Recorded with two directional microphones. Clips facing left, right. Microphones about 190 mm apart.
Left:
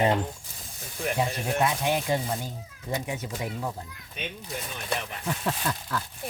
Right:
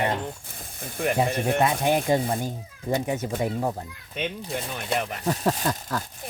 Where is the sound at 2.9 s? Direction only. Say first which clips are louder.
Right 6 dB; 35° right (ahead or behind).